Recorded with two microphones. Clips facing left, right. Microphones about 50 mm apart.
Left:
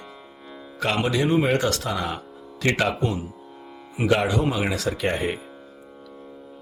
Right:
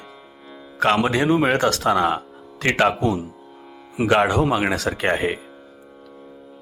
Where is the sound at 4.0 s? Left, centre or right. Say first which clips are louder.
Right 4 dB; right.